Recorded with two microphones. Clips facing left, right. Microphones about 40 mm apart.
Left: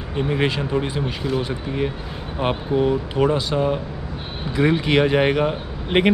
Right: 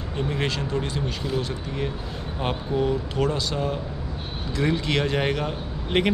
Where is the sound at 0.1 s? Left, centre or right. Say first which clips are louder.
Left 6 dB; left.